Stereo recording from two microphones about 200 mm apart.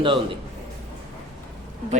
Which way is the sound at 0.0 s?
25° right (ahead or behind).